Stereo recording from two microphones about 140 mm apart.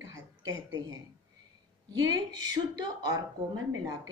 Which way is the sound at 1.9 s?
25° right (ahead or behind).